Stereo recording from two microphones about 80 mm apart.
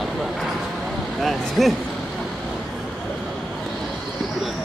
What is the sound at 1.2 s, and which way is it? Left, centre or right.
Speech, centre.